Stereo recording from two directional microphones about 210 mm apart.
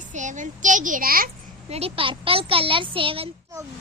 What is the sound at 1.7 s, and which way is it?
Speech, 30° right (ahead or behind).